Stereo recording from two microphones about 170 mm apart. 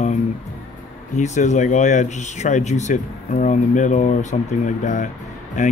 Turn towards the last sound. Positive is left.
turn(degrees=45)  # may be behind; listen again after turning